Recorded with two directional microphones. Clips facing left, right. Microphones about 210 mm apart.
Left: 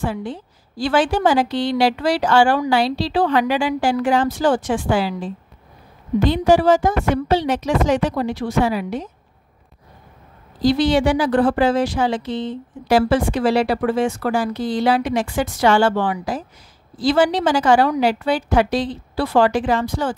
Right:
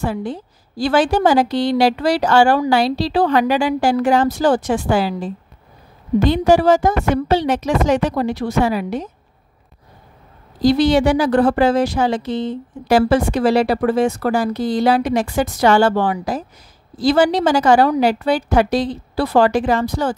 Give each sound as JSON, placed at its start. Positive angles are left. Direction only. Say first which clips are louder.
{"t": 0.0, "sound": "a woman's voice", "louder": "right 2 dB", "side_deg": -40}
{"t": 10.6, "sound": "speech", "louder": "right 2 dB", "side_deg": -40}